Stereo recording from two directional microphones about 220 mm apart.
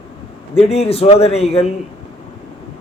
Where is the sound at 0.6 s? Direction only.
30° left (ahead or behind).